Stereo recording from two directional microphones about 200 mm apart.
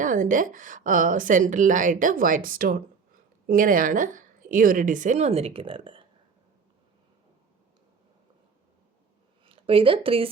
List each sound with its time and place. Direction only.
0.0 s a woman's voice: 40° right (ahead or behind); by 6.1 s 25° right (ahead or behind)
9.5 s speech: 25° right (ahead or behind)